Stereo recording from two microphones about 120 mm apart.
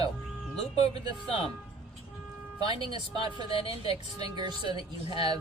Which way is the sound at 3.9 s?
35° right (ahead or behind).